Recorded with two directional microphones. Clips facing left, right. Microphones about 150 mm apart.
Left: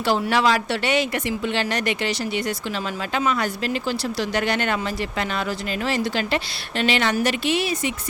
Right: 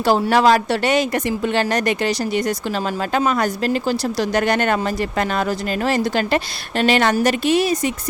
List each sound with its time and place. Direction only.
0.0 s speech: 40° right (ahead or behind)